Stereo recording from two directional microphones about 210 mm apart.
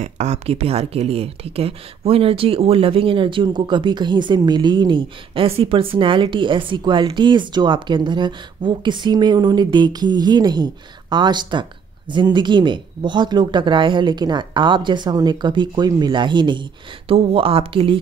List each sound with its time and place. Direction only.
0.0 s speech: 30° right (ahead or behind)